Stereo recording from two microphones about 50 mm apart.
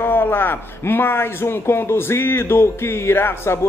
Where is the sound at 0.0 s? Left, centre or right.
Left.